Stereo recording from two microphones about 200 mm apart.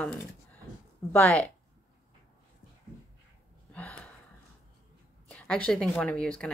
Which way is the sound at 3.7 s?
5° left (ahead or behind).